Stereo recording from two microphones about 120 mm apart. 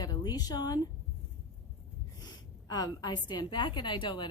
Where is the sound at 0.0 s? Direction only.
35° left (ahead or behind).